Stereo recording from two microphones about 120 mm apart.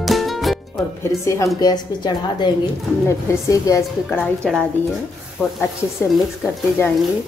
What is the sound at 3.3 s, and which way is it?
Speech, 25° left (ahead or behind).